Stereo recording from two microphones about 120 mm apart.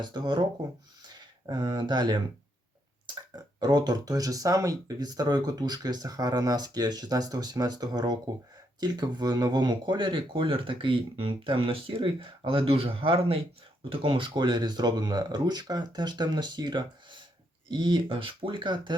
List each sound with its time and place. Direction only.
0.0 s speech: 40° right (ahead or behind)